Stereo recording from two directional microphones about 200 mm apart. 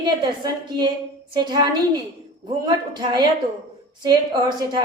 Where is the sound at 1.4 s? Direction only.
20° right (ahead or behind).